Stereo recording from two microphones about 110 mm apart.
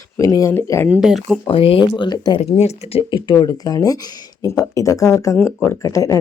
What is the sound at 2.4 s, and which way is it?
Speech, 75° left (ahead or behind).